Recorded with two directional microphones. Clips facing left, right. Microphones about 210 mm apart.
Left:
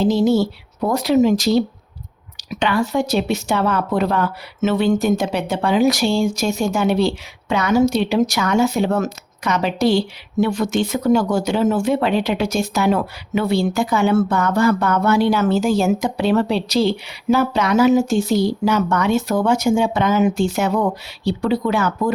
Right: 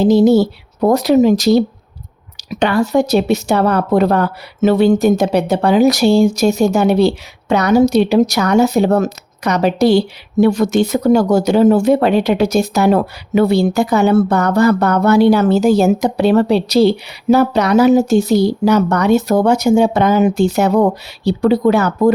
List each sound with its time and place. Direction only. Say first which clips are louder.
0.0 s speech: right 6 dB; 40° right (ahead or behind)